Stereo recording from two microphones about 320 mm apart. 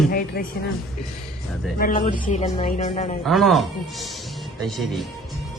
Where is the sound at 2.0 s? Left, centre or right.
Left.